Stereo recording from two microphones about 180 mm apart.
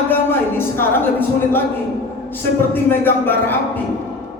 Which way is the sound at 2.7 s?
10° left (ahead or behind).